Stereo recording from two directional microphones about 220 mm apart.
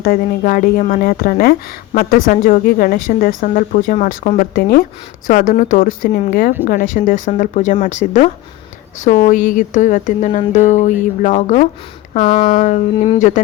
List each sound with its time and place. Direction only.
0.0 s a woman's voice: 40° left (ahead or behind)